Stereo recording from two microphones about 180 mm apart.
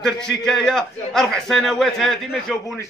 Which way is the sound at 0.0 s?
5° left (ahead or behind).